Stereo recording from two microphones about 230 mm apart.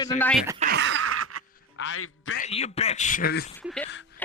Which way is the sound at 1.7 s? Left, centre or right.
Left.